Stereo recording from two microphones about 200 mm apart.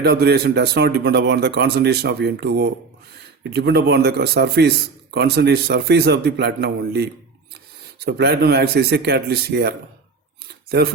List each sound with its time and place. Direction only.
0.0 s a man's voice: 55° right (ahead or behind)